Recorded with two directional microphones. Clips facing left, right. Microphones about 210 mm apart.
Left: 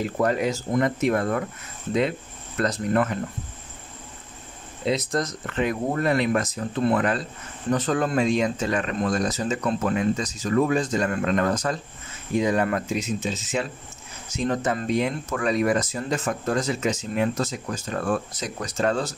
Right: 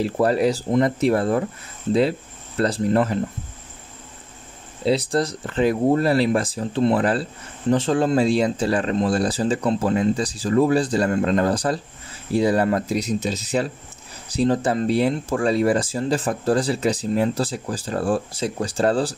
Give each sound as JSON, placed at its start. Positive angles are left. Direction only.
{"t": 0.0, "sound": "speech", "side_deg": -35}
{"t": 4.8, "sound": "speech", "side_deg": -30}